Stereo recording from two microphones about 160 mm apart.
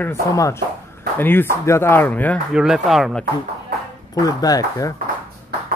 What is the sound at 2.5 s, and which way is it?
Speech, 5° right (ahead or behind).